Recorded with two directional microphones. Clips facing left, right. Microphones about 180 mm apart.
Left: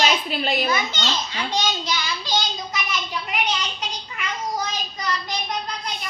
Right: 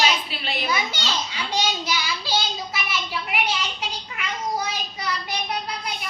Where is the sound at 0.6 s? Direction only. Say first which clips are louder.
Left 2 dB; 10° right (ahead or behind).